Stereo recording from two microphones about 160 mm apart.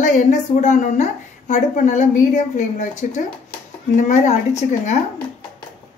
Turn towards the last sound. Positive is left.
turn(degrees=45)  # may be behind; listen again after turning